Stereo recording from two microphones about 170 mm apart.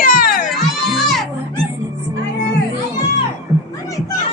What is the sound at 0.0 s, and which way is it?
Baby cry, 55° left (ahead or behind).